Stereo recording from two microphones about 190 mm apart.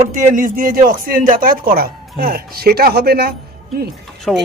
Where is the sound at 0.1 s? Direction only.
40° right (ahead or behind).